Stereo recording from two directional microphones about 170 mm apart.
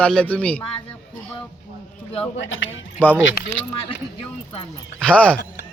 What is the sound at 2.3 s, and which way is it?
Speech, 90° left.